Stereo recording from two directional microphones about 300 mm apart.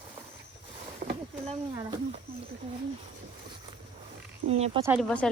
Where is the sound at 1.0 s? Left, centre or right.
Right.